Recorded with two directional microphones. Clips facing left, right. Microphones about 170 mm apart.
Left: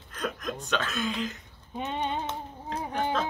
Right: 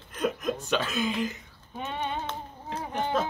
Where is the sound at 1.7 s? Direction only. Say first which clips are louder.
Left 2 dB; 15° left (ahead or behind).